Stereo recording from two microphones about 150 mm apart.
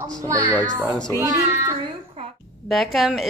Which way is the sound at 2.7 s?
Centre (ahead or behind).